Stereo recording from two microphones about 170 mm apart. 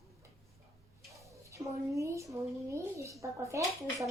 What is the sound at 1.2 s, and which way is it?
Speech, 20° right (ahead or behind).